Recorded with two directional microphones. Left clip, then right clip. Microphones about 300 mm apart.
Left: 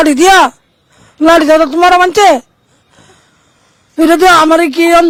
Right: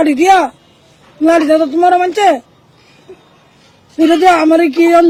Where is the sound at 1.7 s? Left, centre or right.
Left.